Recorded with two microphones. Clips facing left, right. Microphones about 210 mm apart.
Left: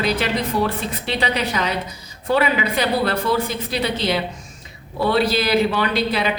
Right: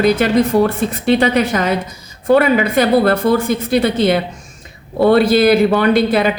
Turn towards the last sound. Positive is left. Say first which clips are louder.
# right 8 dB
turn(degrees=-50)  # may be behind; listen again after turning